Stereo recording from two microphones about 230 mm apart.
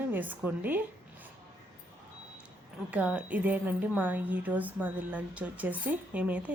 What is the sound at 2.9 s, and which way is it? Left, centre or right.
A woman's voice, centre.